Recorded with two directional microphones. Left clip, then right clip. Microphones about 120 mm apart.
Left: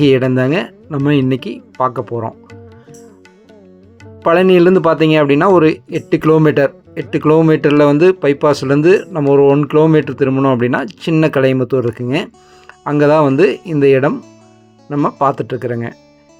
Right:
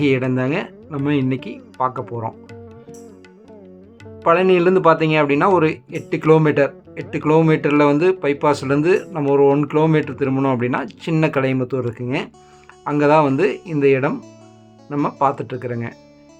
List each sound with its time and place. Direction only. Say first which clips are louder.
0.0 s speech: left 7 dB; 50° left (ahead or behind)
4.2 s speech: left 5 dB; 50° left (ahead or behind)
10.2 s speech: left 6 dB; 35° left (ahead or behind)
10.6 s speech: left 6 dB; 50° left (ahead or behind)
14.8 s speech: left 5 dB; 30° left (ahead or behind)
15.2 s speech: left 4 dB; 45° left (ahead or behind)